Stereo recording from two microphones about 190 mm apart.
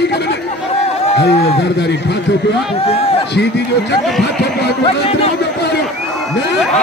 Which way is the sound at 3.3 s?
60° left (ahead or behind).